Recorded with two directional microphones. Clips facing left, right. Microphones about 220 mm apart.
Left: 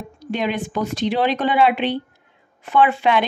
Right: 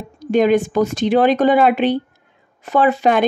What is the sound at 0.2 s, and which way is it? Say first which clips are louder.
Speech: right 10 dB; 45° right (ahead or behind).